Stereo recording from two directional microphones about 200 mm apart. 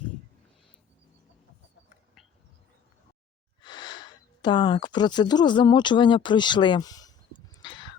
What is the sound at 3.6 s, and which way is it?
Speech, 20° left (ahead or behind).